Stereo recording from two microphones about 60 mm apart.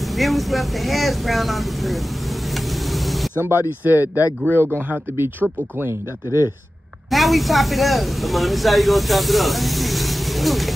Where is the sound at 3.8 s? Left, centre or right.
Right.